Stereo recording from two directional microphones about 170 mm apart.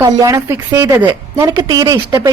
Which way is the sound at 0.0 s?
20° right (ahead or behind).